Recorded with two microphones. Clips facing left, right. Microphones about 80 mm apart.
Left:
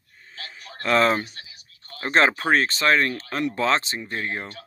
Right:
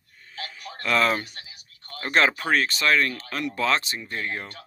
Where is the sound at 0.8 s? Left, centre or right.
Left.